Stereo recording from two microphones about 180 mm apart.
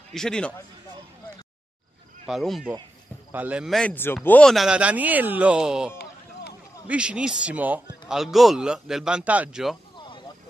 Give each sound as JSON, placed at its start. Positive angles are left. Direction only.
{"t": 0.1, "sound": "speech", "side_deg": 5}
{"t": 2.2, "sound": "speech", "side_deg": 0}
{"t": 9.9, "sound": "a sound", "side_deg": 25}